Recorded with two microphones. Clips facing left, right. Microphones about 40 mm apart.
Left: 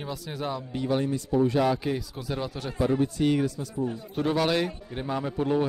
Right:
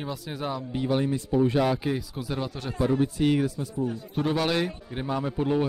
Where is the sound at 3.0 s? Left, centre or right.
Centre.